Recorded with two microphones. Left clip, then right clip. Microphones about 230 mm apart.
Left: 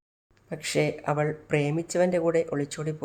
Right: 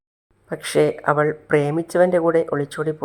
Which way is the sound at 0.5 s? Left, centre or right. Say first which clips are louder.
Right 8 dB; centre.